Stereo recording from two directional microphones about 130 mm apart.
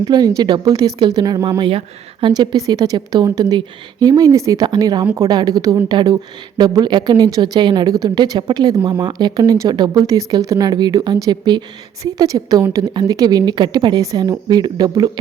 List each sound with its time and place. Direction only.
0.0 s a woman's voice: 30° right (ahead or behind)